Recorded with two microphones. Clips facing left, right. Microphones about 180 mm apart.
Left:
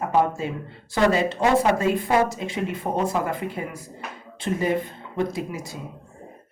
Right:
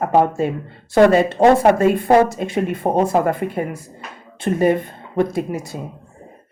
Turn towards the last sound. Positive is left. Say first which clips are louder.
# right 7 dB
turn(degrees=-55)  # may be behind; listen again after turning